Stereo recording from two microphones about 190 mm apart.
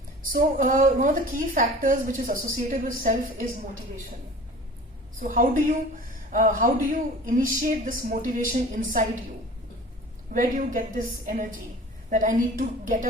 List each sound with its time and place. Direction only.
0.3 s a woman's voice: 45° right (ahead or behind)
5.2 s a woman's voice: 45° right (ahead or behind)
10.3 s a woman's voice: 45° right (ahead or behind)